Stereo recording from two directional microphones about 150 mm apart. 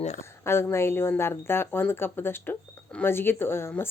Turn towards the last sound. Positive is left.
turn(degrees=15)  # may be behind; listen again after turning